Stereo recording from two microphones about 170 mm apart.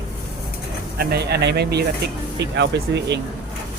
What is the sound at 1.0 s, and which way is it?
Speech, 70° right (ahead or behind).